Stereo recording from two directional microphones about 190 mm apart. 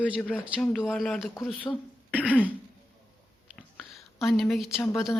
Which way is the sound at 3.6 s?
Centre (ahead or behind).